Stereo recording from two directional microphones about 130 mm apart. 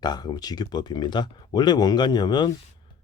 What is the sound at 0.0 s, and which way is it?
Speech, 35° left (ahead or behind).